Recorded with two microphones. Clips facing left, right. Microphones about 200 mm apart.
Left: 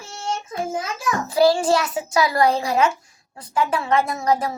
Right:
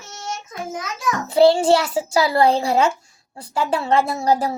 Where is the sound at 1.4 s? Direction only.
25° right (ahead or behind).